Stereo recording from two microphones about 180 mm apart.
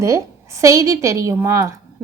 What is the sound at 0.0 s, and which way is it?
A woman's voice, 15° right (ahead or behind).